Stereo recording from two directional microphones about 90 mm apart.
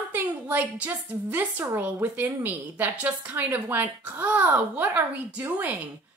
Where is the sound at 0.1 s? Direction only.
15° right (ahead or behind).